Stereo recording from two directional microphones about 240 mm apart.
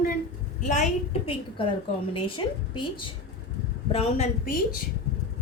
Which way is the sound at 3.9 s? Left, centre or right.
Left.